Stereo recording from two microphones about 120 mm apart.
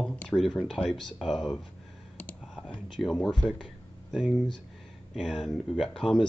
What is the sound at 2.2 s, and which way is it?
Computer keyboard, 10° left (ahead or behind).